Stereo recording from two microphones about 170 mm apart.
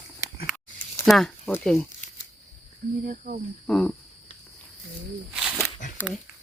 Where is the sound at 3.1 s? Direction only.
55° right (ahead or behind).